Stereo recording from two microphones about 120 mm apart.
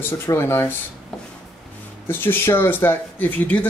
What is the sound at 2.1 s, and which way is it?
Speech, 20° left (ahead or behind).